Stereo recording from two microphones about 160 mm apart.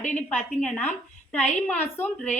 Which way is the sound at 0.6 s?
10° left (ahead or behind).